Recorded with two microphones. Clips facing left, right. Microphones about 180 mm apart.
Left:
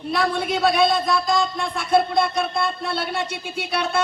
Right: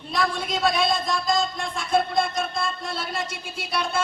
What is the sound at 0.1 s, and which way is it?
A man's voice, 60° left (ahead or behind).